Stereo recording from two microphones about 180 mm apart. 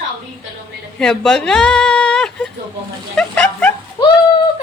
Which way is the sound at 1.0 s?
5° left (ahead or behind).